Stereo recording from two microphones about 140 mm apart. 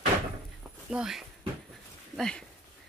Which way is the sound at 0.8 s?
5° right (ahead or behind).